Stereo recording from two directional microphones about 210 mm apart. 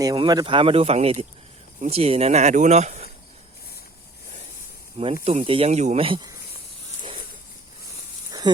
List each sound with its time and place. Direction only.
0.0 s speech: 20° right (ahead or behind)
5.2 s speech: 35° right (ahead or behind)